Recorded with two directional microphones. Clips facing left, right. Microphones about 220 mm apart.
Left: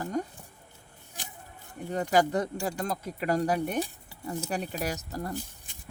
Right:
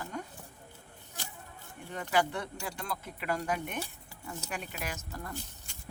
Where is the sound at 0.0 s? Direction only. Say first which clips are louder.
Left 9 dB; 40° left (ahead or behind).